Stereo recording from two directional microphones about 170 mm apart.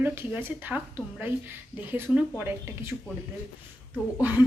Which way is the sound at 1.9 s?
10° right (ahead or behind).